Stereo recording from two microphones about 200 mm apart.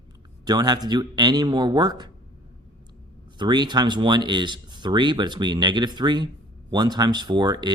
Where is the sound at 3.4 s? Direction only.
20° right (ahead or behind).